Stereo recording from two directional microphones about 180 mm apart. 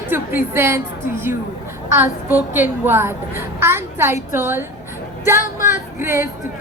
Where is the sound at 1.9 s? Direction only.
10° right (ahead or behind).